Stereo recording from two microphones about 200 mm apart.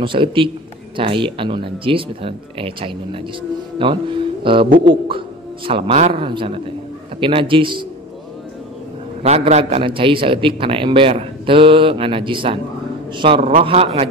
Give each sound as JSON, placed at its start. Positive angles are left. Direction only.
{"t": 0.0, "sound": "a man's voice", "side_deg": -25}
{"t": 9.2, "sound": "a man's voice", "side_deg": -35}